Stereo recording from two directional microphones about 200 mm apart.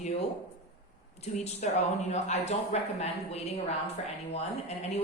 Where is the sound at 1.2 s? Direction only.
35° left (ahead or behind).